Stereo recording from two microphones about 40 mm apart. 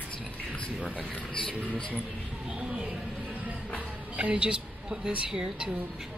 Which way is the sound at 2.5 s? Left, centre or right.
Right.